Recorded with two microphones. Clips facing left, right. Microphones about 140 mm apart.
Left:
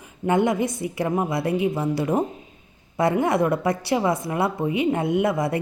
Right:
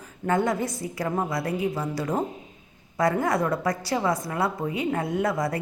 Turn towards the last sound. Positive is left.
turn(degrees=25)  # may be behind; listen again after turning